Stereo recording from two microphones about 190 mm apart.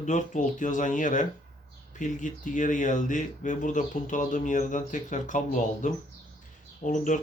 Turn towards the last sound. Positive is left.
turn(degrees=40)  # may be behind; listen again after turning